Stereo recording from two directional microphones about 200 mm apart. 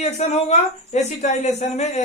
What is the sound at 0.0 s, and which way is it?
Speech, 35° left (ahead or behind).